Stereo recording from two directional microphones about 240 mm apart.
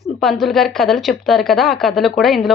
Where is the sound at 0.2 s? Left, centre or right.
Centre.